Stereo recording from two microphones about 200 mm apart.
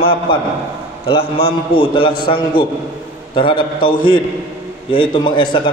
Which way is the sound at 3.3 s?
25° left (ahead or behind).